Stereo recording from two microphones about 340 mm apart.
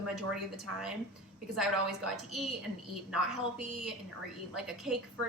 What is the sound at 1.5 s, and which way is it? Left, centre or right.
Speech, centre.